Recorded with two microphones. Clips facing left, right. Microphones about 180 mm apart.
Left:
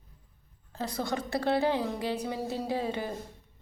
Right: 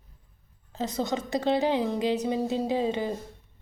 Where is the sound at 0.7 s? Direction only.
20° right (ahead or behind).